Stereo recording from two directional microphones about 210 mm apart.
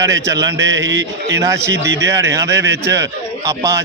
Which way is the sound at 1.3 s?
15° right (ahead or behind).